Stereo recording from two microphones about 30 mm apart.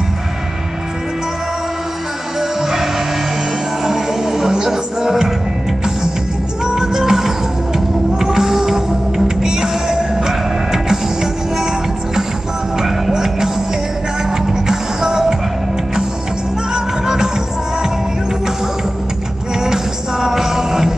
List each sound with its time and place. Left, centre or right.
2.6 s music: centre
6.6 s music: centre
13.1 s music: centre
16.7 s music: centre
19.6 s music: centre